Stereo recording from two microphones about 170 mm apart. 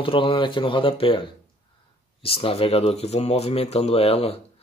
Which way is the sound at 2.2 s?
35° left (ahead or behind).